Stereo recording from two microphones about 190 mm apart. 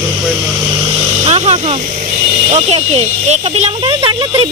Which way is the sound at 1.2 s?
30° right (ahead or behind).